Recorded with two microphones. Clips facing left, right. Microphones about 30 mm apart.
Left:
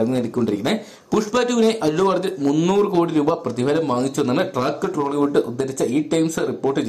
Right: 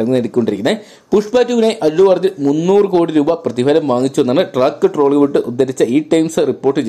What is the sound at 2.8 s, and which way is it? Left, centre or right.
Speech, right.